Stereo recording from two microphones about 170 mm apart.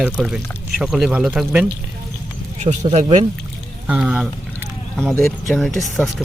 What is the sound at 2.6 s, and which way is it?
Speech, 40° right (ahead or behind).